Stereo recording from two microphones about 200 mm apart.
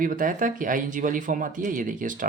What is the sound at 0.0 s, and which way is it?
Speech, 45° right (ahead or behind).